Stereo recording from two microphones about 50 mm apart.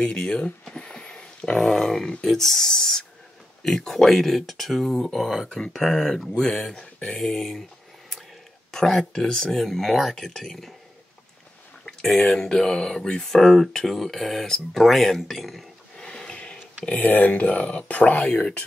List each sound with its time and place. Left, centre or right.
0.0 s speech: centre
0.7 s a sound: centre
1.6 s speech: centre
7.2 s speech: centre
8.7 s speech: centre
12.2 s speech: centre
16.0 s a sound: centre
17.0 s speech: left